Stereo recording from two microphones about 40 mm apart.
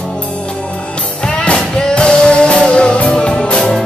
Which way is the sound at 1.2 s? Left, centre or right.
Left.